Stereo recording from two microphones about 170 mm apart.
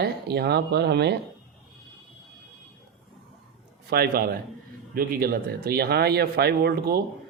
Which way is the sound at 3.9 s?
65° right (ahead or behind).